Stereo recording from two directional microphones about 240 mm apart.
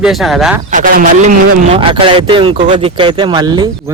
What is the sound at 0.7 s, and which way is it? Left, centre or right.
A man's voice, right.